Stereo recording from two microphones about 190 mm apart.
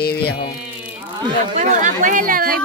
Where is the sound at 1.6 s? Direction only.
45° right (ahead or behind).